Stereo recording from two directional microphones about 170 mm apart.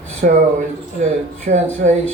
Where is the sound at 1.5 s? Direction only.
50° right (ahead or behind).